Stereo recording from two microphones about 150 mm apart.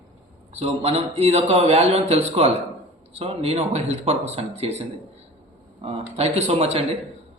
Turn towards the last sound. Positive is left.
turn(degrees=-45)  # may be behind; listen again after turning